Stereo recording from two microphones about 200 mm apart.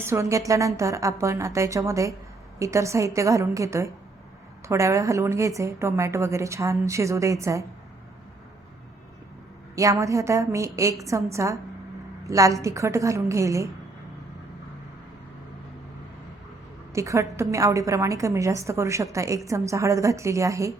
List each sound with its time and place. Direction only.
0.0 s a woman's voice: 15° right (ahead or behind)
9.7 s a woman's voice: 15° right (ahead or behind)
16.9 s a woman's voice: 15° right (ahead or behind)